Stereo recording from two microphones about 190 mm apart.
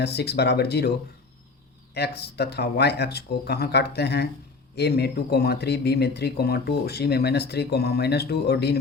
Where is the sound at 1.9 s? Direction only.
60° left (ahead or behind).